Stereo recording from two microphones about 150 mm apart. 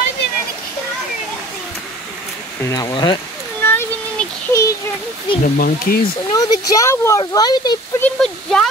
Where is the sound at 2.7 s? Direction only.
25° left (ahead or behind).